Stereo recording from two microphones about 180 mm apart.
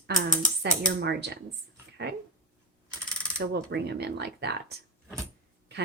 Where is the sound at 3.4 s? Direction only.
65° right (ahead or behind).